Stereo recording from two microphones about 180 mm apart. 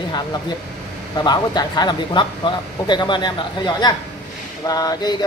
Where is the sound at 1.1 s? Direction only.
25° left (ahead or behind).